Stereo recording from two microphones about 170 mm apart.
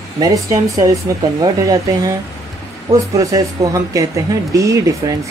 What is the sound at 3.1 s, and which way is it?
Speech, 20° right (ahead or behind).